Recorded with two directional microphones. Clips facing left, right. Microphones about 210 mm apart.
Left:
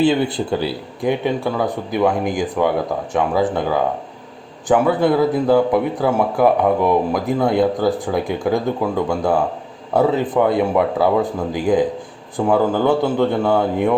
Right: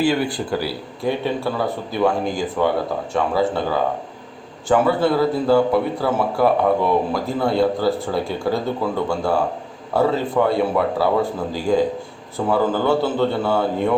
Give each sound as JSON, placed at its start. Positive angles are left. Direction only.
{"t": 0.0, "sound": "speech", "side_deg": 20}